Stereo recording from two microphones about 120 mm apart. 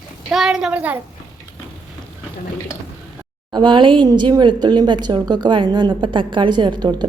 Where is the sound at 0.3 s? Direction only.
5° right (ahead or behind).